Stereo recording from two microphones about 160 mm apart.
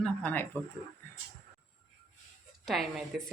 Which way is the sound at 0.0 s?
10° left (ahead or behind).